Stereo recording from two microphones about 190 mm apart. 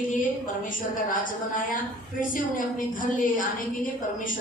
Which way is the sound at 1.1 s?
45° left (ahead or behind).